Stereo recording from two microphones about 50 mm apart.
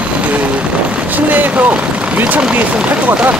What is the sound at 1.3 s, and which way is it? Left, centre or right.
Speech, right.